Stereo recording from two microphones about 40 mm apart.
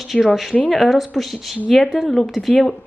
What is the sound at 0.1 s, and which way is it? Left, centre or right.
Speech, centre.